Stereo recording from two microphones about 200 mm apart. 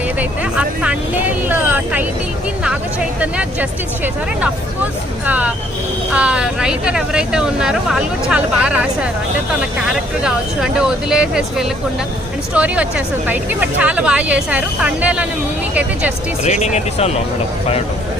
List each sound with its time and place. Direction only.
0.2 s speech: 5° right (ahead or behind)
3.2 s speech: 10° right (ahead or behind)
16.4 s speech: 35° left (ahead or behind)